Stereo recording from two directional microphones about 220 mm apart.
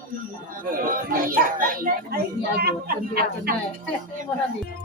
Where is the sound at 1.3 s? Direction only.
40° right (ahead or behind).